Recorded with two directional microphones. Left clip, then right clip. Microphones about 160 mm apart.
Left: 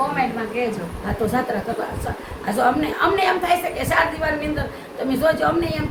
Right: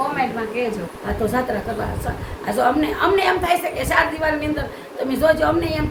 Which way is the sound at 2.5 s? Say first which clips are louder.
Right 1 dB; 20° right (ahead or behind).